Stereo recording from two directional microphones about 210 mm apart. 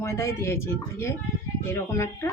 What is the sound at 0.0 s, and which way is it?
Speech, 15° left (ahead or behind).